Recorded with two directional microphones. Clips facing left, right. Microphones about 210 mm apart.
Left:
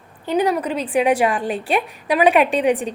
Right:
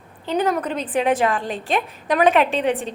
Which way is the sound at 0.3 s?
10° left (ahead or behind).